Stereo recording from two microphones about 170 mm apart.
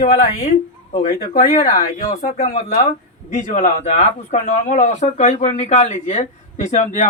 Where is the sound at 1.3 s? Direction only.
55° left (ahead or behind).